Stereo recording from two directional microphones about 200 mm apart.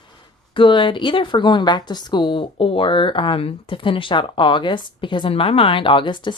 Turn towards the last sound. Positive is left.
turn(degrees=25)  # may be behind; listen again after turning